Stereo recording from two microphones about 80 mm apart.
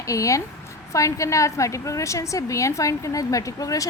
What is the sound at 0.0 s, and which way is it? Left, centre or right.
A woman's voice, left.